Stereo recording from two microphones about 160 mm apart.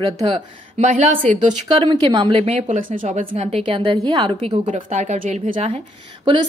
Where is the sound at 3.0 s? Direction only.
55° right (ahead or behind).